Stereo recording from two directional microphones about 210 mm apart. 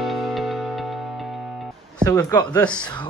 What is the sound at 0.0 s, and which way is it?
Music, centre (ahead or behind).